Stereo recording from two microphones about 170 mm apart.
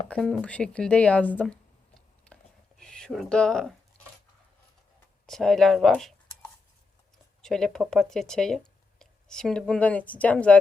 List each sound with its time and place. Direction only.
0.1 s speech: 5° left (ahead or behind)
2.2 s a sound: 5° left (ahead or behind)
3.9 s cutlery: 5° left (ahead or behind)
5.2 s speech: centre (ahead or behind)
7.4 s speech: centre (ahead or behind)